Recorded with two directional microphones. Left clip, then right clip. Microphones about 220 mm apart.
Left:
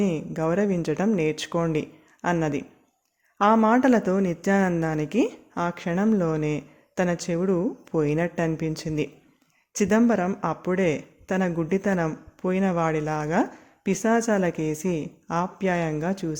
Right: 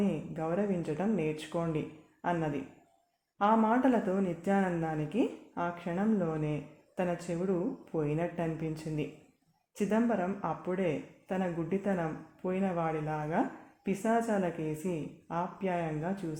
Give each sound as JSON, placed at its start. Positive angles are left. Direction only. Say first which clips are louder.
{"t": 0.0, "sound": "speech", "louder": "left 9 dB", "side_deg": 45}